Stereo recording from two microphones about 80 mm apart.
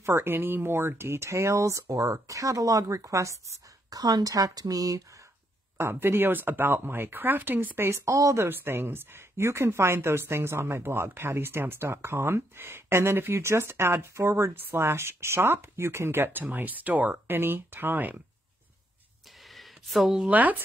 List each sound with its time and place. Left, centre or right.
0.0 s speech: right
3.9 s speech: right
5.8 s speech: right
8.5 s speech: right
19.5 s a sound: centre
20.2 s speech: right